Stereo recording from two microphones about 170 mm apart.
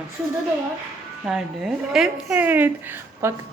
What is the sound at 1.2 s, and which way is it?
A woman's voice, 5° right (ahead or behind).